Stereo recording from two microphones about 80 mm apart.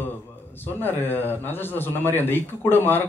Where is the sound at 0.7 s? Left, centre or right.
Left.